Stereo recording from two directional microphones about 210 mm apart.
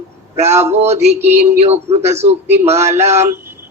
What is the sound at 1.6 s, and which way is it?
A man's voice, 30° right (ahead or behind).